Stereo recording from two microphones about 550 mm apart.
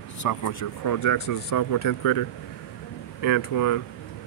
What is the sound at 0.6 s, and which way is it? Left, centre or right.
Speech, left.